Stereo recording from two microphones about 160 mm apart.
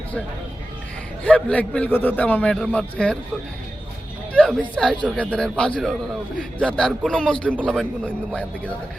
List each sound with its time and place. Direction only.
1.2 s a man's voice: 5° left (ahead or behind)
4.4 s a man's voice: 5° left (ahead or behind)